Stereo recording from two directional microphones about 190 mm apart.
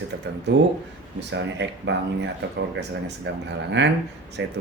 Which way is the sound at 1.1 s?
70° right (ahead or behind).